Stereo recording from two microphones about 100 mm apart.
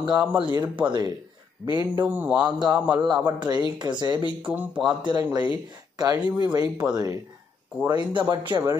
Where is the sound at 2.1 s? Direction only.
15° right (ahead or behind).